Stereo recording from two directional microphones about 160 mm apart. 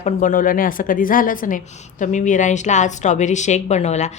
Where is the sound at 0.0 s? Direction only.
50° left (ahead or behind).